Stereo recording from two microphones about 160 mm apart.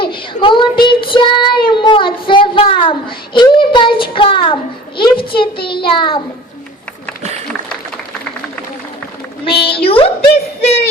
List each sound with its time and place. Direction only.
0.0 s child singing: 30° left (ahead or behind)
4.9 s a woman's voice: 30° left (ahead or behind)
5.6 s child singing: 30° left (ahead or behind)
9.4 s a woman's voice: 35° left (ahead or behind)
9.8 s child singing: 35° left (ahead or behind)
10.6 s a sound: 40° left (ahead or behind)